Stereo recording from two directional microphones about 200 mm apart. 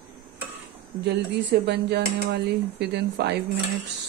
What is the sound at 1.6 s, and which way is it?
Speech, 60° right (ahead or behind).